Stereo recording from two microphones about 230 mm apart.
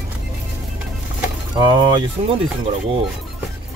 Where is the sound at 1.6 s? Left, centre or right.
Centre.